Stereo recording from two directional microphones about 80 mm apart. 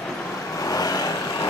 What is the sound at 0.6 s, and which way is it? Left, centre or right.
Vehicle, left.